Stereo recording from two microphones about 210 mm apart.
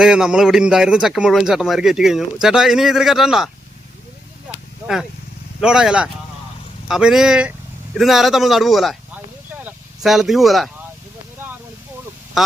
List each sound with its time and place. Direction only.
0.0 s a man's voice: 5° right (ahead or behind)
5.5 s a man's voice: 5° right (ahead or behind)